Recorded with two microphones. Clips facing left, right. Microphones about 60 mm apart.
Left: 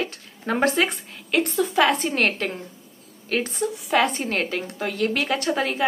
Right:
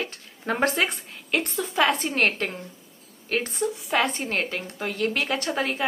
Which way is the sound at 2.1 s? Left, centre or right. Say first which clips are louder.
Left 1 dB; right.